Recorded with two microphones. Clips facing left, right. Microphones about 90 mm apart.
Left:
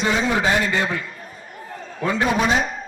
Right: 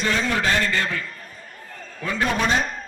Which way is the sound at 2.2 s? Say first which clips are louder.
Left 1 dB; 10° left (ahead or behind).